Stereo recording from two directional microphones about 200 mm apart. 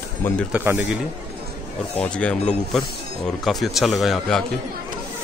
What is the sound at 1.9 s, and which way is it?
A man's voice, 5° left (ahead or behind).